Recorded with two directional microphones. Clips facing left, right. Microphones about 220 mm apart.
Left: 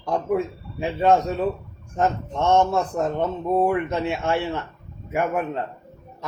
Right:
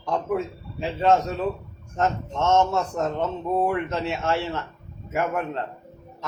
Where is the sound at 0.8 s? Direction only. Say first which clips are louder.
Left 2 dB; 15° left (ahead or behind).